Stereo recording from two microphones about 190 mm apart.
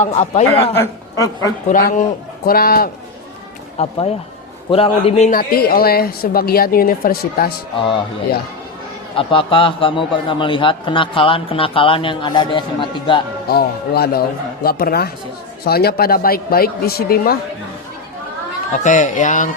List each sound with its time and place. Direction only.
0.0 s speech: 35° left (ahead or behind)
1.7 s speech: 45° left (ahead or behind)
3.8 s speech: 30° left (ahead or behind); by 7.5 s 50° left (ahead or behind)
9.1 s a man's voice: 30° left (ahead or behind)
13.5 s speech: 55° left (ahead or behind)
18.7 s speech: 40° left (ahead or behind)